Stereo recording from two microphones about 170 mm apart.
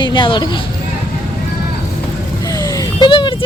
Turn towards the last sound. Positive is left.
turn(degrees=30)  # may be behind; listen again after turning